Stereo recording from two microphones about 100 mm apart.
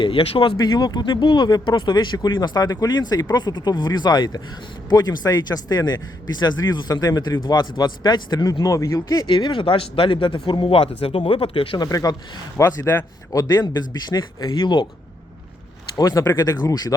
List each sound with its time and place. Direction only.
0.0 s speech: 60° left (ahead or behind); by 9.2 s 30° left (ahead or behind)
9.2 s speech: 50° left (ahead or behind)
11.8 s speech: 40° left (ahead or behind)
13.3 s speech: 40° left (ahead or behind)
16.0 s speech: 35° left (ahead or behind)